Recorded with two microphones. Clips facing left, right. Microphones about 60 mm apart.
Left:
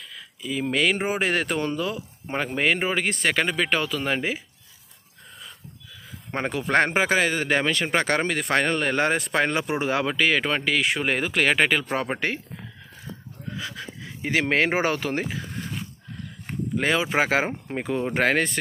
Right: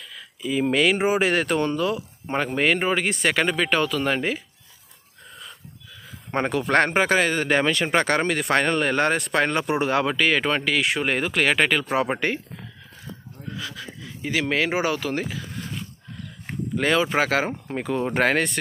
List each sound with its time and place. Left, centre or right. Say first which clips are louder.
0.4 s speech: right 3 dB; centre
6.3 s speech: right 2 dB; centre
13.6 s speech: left 1 dB; left
16.7 s speech: right 2 dB; centre